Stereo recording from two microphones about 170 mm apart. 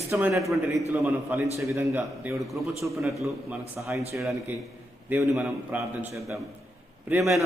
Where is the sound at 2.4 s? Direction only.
Centre (ahead or behind).